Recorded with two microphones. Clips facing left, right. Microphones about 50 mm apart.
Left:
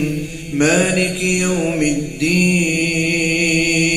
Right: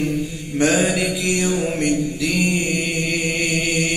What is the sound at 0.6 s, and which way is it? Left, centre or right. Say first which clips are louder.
Mantra: left 3 dB; left.